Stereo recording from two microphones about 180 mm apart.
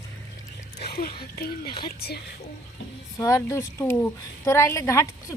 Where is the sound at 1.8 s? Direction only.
60° left (ahead or behind).